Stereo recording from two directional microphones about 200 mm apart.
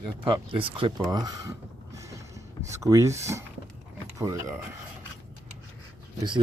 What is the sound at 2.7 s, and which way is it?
Speech, 15° right (ahead or behind).